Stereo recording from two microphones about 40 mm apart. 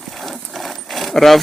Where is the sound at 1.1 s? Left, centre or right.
Centre.